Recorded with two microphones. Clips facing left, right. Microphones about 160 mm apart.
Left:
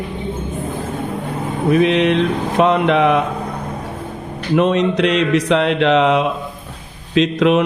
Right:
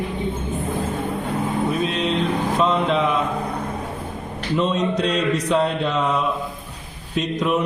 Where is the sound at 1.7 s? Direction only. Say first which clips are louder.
Left 8 dB; 75° left (ahead or behind).